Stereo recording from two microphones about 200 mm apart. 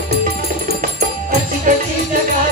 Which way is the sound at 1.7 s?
40° right (ahead or behind).